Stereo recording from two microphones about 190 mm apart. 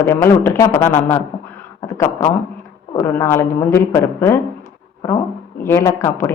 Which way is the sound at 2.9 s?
15° left (ahead or behind).